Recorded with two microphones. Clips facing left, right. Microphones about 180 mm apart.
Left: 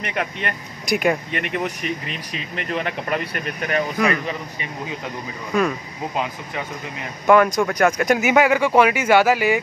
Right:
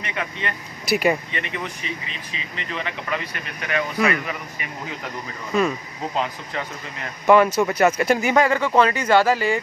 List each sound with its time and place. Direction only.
0.0 s speech: 55° left (ahead or behind)
0.8 s speech: centre (ahead or behind)
1.3 s speech: 55° left (ahead or behind)
4.3 s speech: 25° left (ahead or behind)
5.5 s speech: centre (ahead or behind)
6.1 s speech: 15° left (ahead or behind)
7.2 s speech: 5° right (ahead or behind)